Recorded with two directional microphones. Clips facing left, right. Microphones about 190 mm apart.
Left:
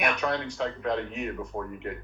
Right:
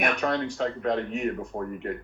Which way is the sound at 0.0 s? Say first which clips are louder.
Right 2 dB; 45° right (ahead or behind).